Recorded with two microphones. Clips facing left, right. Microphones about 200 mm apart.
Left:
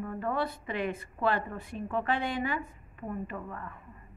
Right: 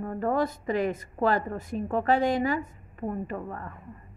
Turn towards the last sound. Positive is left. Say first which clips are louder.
# right 4 dB
turn(degrees=-40)  # may be behind; listen again after turning